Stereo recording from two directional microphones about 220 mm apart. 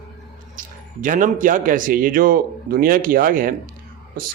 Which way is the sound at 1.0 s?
35° right (ahead or behind).